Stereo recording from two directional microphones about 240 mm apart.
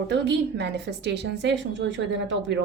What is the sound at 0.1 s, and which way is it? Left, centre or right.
A woman's voice, right.